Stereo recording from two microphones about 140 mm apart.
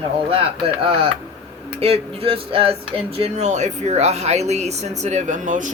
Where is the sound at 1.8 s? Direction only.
45° right (ahead or behind).